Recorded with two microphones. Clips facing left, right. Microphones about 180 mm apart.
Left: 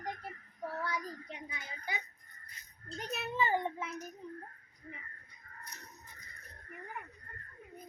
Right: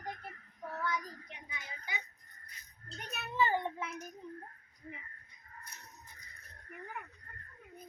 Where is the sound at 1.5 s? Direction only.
35° left (ahead or behind).